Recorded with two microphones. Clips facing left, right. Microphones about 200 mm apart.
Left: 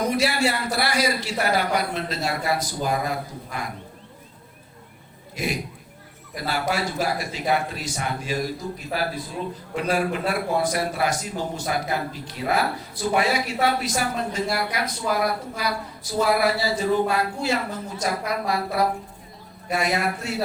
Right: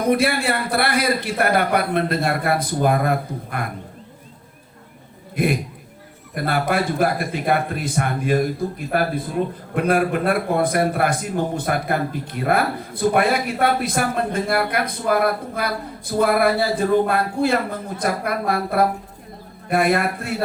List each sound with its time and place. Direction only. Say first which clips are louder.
0.1 s a man's voice: right 4 dB; 55° right (ahead or behind)
5.4 s a man's voice: right 7 dB; 55° right (ahead or behind)